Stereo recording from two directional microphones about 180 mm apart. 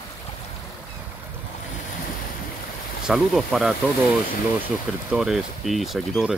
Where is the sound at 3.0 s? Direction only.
5° right (ahead or behind).